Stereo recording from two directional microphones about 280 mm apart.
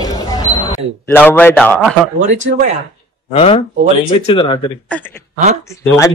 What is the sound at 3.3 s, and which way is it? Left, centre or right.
Speech, left.